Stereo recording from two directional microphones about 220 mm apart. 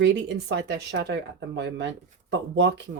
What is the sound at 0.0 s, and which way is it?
Speech, 50° right (ahead or behind).